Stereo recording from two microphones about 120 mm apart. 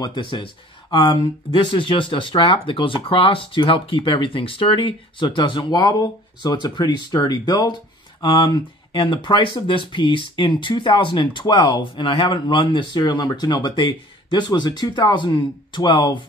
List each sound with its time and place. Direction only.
0.0 s speech: 40° left (ahead or behind)